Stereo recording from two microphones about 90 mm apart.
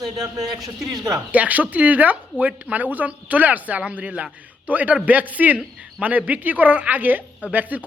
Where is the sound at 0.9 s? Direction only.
40° right (ahead or behind).